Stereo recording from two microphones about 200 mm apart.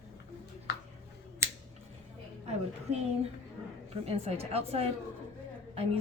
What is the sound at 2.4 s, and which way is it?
Speech, 30° right (ahead or behind).